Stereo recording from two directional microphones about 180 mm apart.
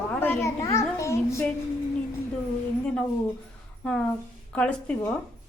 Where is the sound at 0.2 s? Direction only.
15° left (ahead or behind).